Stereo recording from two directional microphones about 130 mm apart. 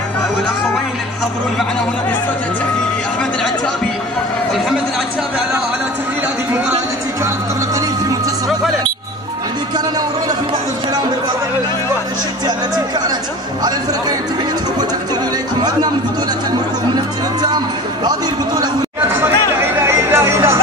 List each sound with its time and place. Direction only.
18.9 s chatter: 20° right (ahead or behind)